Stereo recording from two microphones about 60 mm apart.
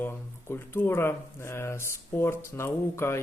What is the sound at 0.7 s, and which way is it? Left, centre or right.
Speech, left.